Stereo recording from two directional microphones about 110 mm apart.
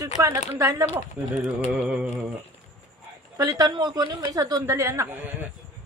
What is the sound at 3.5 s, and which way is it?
A woman's voice, 35° right (ahead or behind).